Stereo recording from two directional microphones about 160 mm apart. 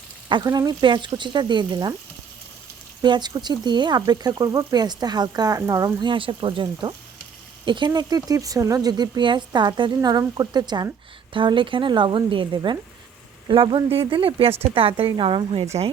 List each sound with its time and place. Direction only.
0.3 s speech: 25° right (ahead or behind)
3.0 s a woman's voice: 30° right (ahead or behind)